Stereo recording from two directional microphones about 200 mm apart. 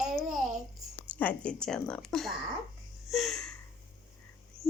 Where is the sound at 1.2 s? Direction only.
5° left (ahead or behind).